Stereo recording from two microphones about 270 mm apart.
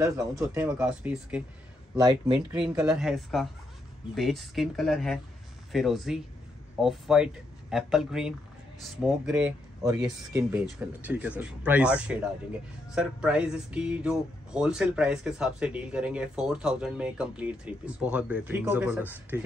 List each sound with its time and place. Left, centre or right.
0.0 s speech: centre
2.0 s speech: centre
2.8 s speech: centre